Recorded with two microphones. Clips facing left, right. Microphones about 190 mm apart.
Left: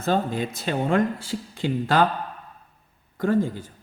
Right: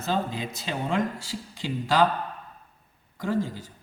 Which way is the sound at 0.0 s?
55° left (ahead or behind).